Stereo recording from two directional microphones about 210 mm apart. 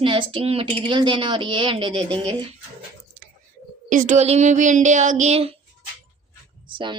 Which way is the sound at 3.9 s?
40° right (ahead or behind).